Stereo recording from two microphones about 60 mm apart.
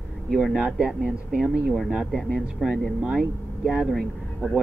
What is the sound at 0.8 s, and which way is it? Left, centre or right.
Speech, centre.